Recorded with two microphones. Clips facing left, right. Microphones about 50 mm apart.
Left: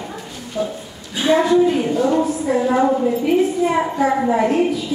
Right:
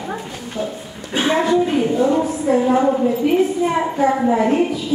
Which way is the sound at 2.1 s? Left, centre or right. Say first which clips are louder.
Right 1 dB; centre.